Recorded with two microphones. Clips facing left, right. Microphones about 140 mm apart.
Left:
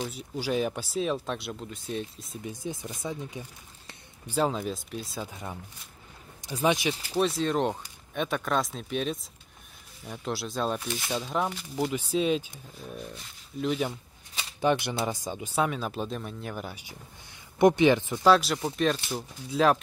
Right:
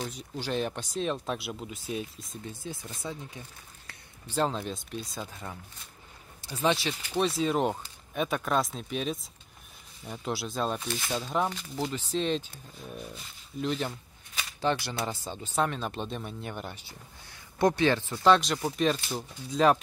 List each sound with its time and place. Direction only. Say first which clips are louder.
0.0 s speech: left 3 dB; 5° left (ahead or behind)
2.4 s speech: left 5 dB; 15° left (ahead or behind)
6.4 s speech: left 2 dB; 15° left (ahead or behind)
7.2 s speech: even; centre (ahead or behind)
11.4 s speech: left 2 dB; 10° left (ahead or behind)
12.9 s speech: left 1 dB; centre (ahead or behind)
17.6 s speech: left 4 dB; 20° left (ahead or behind)
18.2 s speech: even; 5° left (ahead or behind)